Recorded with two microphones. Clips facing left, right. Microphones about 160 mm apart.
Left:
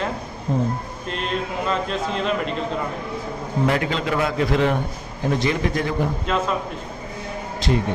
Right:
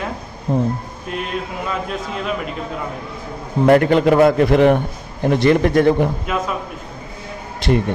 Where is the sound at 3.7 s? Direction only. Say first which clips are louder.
Right 12 dB; 55° right (ahead or behind).